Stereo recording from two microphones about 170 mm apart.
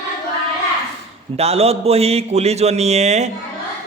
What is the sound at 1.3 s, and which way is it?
A man's voice, 35° right (ahead or behind).